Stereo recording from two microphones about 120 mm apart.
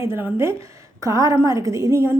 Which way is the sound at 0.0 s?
20° right (ahead or behind).